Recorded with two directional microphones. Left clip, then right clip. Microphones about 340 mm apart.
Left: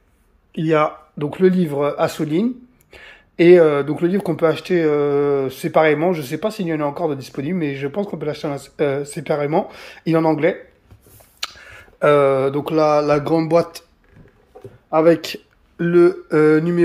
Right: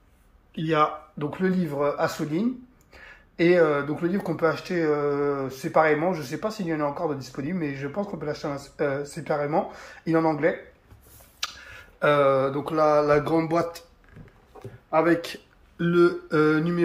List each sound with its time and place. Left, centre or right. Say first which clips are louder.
0.5 s speech: left 6 dB; centre
12.0 s speech: left 6 dB; centre
14.9 s speech: left 7 dB; left
15.9 s mantra: left 7 dB; centre